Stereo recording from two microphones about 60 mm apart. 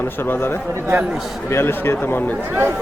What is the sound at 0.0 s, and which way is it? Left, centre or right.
Speech, left.